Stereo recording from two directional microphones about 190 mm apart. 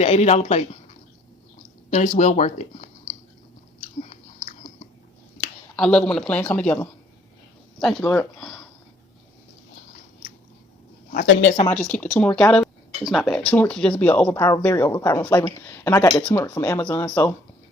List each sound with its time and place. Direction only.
0.0 s speech: 35° left (ahead or behind)
1.9 s speech: 40° left (ahead or behind)
5.7 s speech: 5° left (ahead or behind)
11.1 s speech: 50° left (ahead or behind)
11.7 s speech: 5° left (ahead or behind)